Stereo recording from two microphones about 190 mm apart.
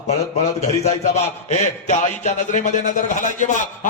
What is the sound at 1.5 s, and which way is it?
A man's voice, 40° left (ahead or behind).